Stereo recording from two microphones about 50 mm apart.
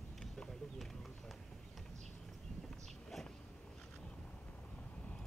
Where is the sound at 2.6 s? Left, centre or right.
Centre.